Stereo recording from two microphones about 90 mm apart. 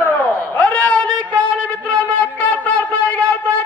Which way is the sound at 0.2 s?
15° left (ahead or behind).